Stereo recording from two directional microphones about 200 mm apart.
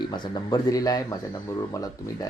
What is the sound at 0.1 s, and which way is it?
Speech, 20° left (ahead or behind).